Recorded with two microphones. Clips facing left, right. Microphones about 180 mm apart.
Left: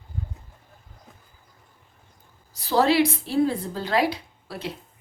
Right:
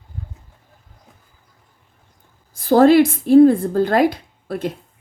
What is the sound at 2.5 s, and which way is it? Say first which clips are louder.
A woman's voice: right 9 dB; 50° right (ahead or behind).